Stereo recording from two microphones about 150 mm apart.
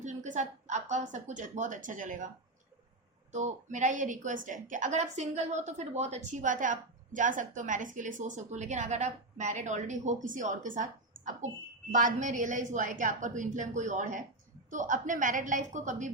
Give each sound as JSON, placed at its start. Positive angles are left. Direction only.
{"t": 0.0, "sound": "a woman's voice", "side_deg": -55}
{"t": 3.3, "sound": "a woman's voice", "side_deg": -55}